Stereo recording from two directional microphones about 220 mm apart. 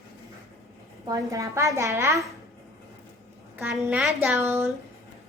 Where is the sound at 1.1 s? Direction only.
15° right (ahead or behind).